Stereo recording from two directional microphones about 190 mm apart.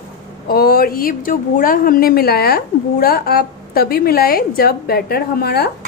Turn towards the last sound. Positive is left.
turn(degrees=55)  # may be behind; listen again after turning